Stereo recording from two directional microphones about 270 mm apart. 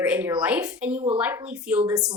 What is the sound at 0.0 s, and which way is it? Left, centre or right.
Speech, centre.